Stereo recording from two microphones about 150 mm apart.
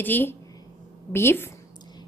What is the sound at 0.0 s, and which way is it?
A woman's voice, 15° left (ahead or behind).